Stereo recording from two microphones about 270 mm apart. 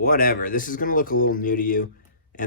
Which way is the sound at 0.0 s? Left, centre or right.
Left.